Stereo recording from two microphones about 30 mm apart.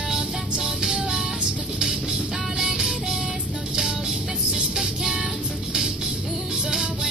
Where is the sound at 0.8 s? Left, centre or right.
Centre.